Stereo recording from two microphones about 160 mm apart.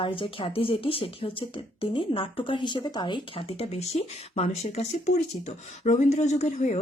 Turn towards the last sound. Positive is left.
turn(degrees=45)  # may be behind; listen again after turning